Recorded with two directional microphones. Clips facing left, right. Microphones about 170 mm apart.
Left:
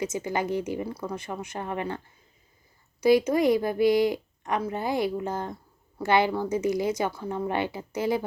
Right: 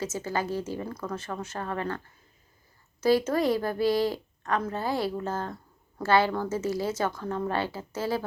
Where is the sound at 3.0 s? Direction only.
15° left (ahead or behind).